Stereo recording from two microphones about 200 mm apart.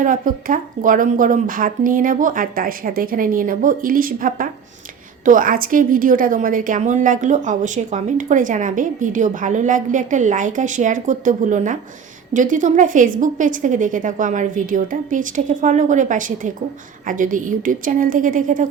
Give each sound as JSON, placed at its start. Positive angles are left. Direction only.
{"t": 0.0, "sound": "a woman's voice", "side_deg": -45}